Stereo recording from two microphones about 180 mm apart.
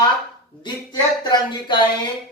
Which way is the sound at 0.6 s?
25° left (ahead or behind).